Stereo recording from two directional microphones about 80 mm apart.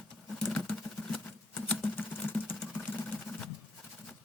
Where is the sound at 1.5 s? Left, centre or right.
Left.